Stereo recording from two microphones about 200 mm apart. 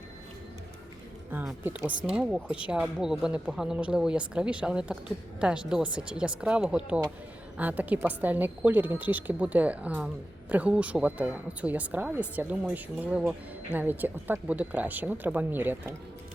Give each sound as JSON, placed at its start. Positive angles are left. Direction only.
{"t": 1.3, "sound": "speech", "side_deg": -10}